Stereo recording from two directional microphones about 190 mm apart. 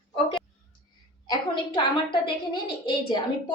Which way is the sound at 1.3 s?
25° left (ahead or behind).